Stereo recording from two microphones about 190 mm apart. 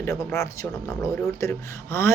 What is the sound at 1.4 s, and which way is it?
Speech, 15° left (ahead or behind).